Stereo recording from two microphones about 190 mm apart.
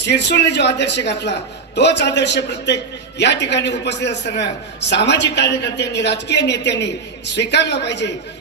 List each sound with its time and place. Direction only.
0.0 s a man's voice: 65° left (ahead or behind)